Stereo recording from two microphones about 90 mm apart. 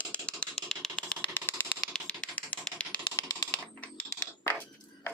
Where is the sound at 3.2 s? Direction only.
30° left (ahead or behind).